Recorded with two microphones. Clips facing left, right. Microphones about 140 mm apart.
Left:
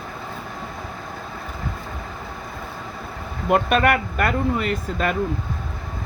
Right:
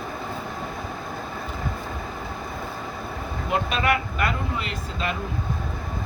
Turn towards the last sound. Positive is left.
turn(degrees=50)  # may be behind; listen again after turning